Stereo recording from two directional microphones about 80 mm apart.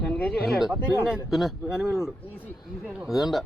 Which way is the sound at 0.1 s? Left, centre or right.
Centre.